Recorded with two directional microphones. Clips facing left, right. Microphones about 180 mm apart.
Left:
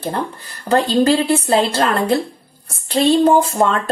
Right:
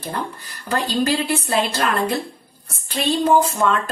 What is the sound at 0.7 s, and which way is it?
A woman's voice, 30° left (ahead or behind).